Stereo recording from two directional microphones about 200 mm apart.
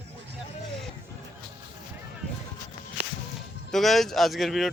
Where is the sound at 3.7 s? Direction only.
Centre (ahead or behind).